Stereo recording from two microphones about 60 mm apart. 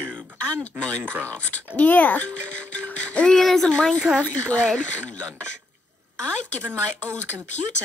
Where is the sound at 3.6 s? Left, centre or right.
Centre.